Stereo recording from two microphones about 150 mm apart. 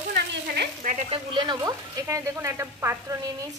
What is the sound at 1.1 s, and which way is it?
A woman's voice, 35° right (ahead or behind).